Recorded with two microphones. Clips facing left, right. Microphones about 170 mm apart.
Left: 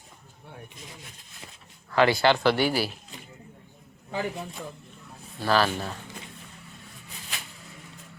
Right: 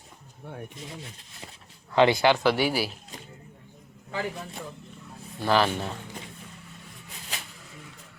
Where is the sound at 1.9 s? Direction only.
20° right (ahead or behind).